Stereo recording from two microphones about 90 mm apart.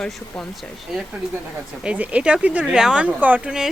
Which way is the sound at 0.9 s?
5° right (ahead or behind).